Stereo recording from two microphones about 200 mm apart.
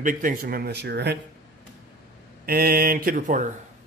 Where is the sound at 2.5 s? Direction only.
50° right (ahead or behind).